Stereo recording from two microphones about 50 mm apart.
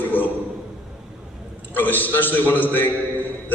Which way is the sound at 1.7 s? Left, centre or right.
Left.